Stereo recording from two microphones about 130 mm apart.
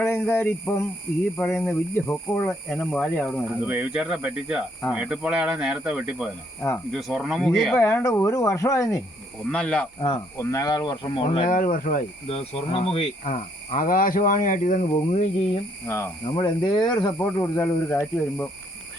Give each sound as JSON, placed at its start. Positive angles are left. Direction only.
{"t": 0.0, "sound": "speech", "side_deg": 15}
{"t": 3.6, "sound": "speech", "side_deg": -10}
{"t": 7.8, "sound": "cricket", "side_deg": 20}
{"t": 9.5, "sound": "speech", "side_deg": 5}
{"t": 10.3, "sound": "speech", "side_deg": 25}
{"t": 11.4, "sound": "speech", "side_deg": 90}
{"t": 12.3, "sound": "speech", "side_deg": 50}
{"t": 13.2, "sound": "speech", "side_deg": 90}
{"t": 15.9, "sound": "cricket", "side_deg": 20}
{"t": 16.3, "sound": "speech", "side_deg": 35}
{"t": 17.3, "sound": "cricket", "side_deg": 20}